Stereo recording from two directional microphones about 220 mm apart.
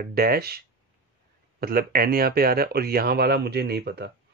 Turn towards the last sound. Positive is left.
turn(degrees=-45)  # may be behind; listen again after turning